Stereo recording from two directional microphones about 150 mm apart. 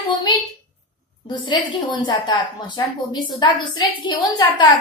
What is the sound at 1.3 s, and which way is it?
A woman's voice, 30° left (ahead or behind).